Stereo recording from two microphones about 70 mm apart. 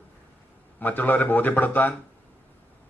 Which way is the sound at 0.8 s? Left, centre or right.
Left.